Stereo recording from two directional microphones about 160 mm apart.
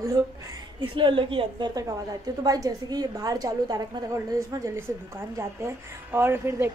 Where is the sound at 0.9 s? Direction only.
30° right (ahead or behind).